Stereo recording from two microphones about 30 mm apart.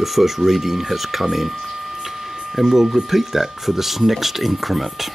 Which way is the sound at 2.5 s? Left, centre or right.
Centre.